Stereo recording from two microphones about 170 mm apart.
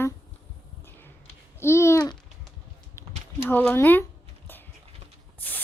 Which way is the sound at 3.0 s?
15° left (ahead or behind).